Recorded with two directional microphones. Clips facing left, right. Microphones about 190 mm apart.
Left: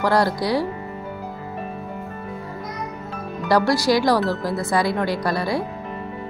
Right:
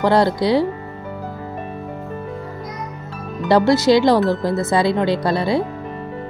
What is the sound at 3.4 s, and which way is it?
Speech, 25° right (ahead or behind).